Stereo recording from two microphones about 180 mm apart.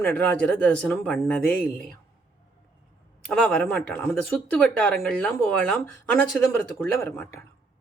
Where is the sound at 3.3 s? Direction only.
5° left (ahead or behind).